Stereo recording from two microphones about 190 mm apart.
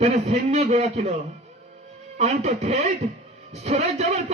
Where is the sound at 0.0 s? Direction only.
35° right (ahead or behind).